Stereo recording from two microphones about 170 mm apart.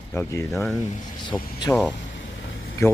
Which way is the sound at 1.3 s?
5° left (ahead or behind).